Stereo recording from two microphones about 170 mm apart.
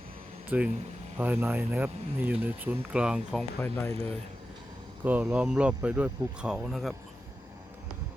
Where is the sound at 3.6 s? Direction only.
15° left (ahead or behind).